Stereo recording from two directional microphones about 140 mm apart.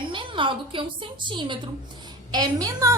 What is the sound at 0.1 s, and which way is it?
A woman's voice, 35° right (ahead or behind).